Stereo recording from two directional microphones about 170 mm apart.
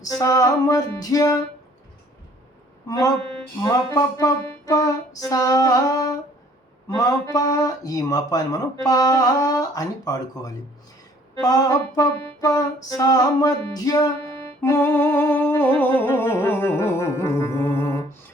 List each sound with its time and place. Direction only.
0.0 s speech: 20° left (ahead or behind)
2.8 s speech: 20° left (ahead or behind)
14.2 s music: 15° left (ahead or behind)